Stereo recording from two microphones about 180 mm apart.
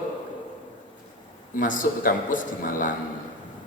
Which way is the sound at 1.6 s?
45° left (ahead or behind).